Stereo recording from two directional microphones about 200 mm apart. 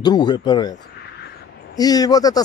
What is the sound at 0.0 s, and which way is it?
Speech, 20° left (ahead or behind).